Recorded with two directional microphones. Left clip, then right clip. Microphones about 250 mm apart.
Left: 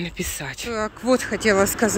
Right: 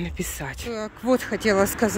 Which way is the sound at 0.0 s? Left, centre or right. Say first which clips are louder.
Left 2 dB; centre.